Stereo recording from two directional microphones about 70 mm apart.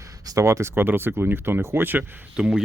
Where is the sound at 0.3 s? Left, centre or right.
Right.